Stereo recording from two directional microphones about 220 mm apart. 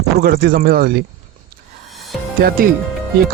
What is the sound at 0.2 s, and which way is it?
Speech, 45° right (ahead or behind).